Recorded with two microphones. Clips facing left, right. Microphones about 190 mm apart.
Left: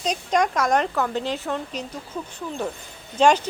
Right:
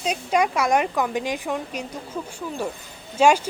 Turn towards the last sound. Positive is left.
turn(degrees=-10)  # may be behind; listen again after turning